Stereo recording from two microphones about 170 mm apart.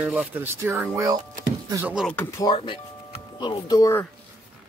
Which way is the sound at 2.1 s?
15° left (ahead or behind).